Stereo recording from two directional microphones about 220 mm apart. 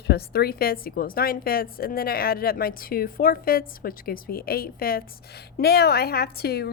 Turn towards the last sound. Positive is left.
turn(degrees=45)  # may be behind; listen again after turning